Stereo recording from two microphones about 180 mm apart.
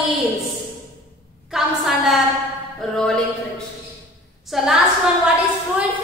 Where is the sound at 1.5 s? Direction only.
Centre (ahead or behind).